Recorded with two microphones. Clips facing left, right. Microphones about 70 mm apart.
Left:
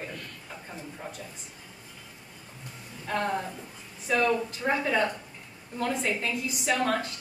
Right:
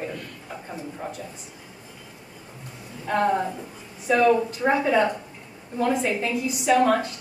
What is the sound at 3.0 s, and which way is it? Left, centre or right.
A woman's voice, centre.